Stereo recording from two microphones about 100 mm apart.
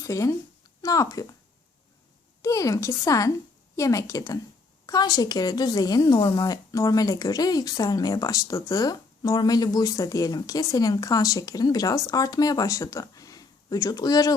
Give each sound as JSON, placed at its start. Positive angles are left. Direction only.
{"t": 0.0, "sound": "speech", "side_deg": 30}
{"t": 2.4, "sound": "speech", "side_deg": 35}